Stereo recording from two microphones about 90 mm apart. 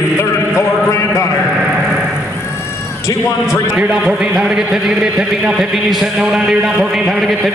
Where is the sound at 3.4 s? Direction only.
10° right (ahead or behind).